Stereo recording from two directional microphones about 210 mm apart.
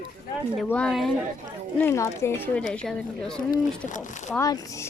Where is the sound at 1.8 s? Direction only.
10° left (ahead or behind).